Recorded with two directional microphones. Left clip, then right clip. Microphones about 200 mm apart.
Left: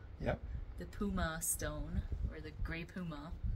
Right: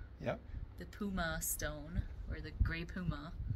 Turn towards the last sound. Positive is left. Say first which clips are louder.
# right 2 dB
turn(degrees=20)  # may be behind; listen again after turning